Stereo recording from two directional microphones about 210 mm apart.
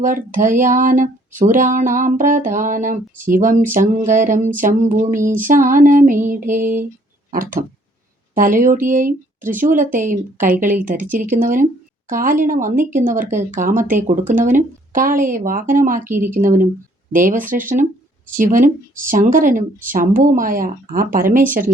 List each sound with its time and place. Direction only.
0.0 s speech: 40° right (ahead or behind)
16.0 s a woman's voice: 10° right (ahead or behind)
16.3 s speech: 40° right (ahead or behind)